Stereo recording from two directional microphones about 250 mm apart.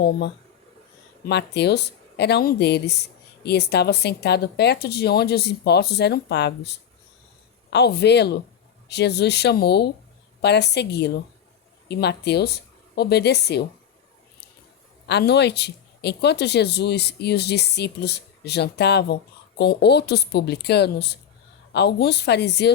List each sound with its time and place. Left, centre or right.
1.3 s a woman's voice: left
15.0 s speech: left